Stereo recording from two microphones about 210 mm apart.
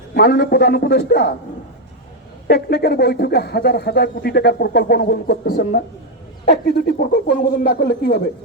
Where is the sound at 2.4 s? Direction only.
50° left (ahead or behind).